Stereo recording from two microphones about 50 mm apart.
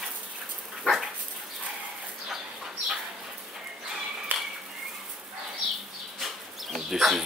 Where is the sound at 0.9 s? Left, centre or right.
Left.